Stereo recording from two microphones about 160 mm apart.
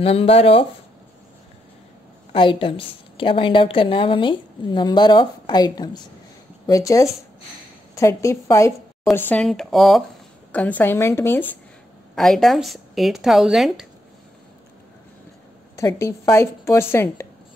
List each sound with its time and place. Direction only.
0.0 s a woman's voice: 35° left (ahead or behind)
2.3 s a woman's voice: 35° left (ahead or behind)
9.1 s speech: 5° left (ahead or behind)
12.2 s speech: centre (ahead or behind)
15.7 s speech: 20° left (ahead or behind)